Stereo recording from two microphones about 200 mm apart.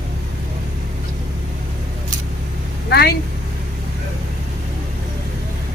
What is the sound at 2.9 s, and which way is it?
Speech, 55° left (ahead or behind).